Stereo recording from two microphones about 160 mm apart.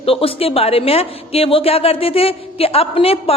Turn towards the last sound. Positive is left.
turn(degrees=35)  # may be behind; listen again after turning